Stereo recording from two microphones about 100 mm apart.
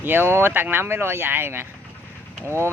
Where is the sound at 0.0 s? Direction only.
20° right (ahead or behind).